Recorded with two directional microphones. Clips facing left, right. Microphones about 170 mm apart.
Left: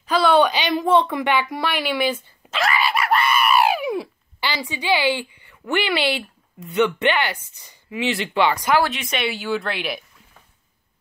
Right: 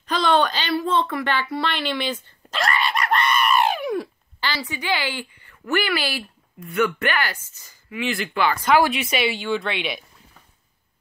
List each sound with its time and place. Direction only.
0.0 s a sound: 10° left (ahead or behind)
6.7 s speech: 25° left (ahead or behind)
8.8 s speech: 10° right (ahead or behind)